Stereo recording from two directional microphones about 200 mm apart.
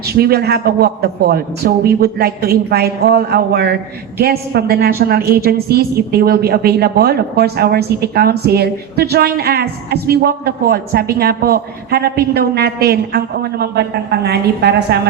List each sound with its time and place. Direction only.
0.0 s a woman's voice: 50° right (ahead or behind)